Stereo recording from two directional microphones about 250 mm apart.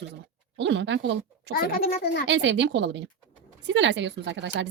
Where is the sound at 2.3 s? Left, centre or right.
Right.